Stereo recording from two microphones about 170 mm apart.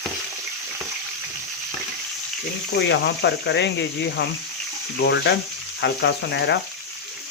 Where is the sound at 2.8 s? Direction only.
90° left.